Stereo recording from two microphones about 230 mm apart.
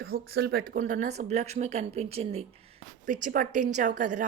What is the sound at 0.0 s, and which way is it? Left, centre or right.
A woman's voice, right.